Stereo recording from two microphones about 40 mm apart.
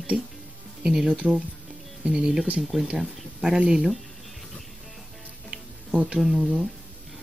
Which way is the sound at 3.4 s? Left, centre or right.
Centre.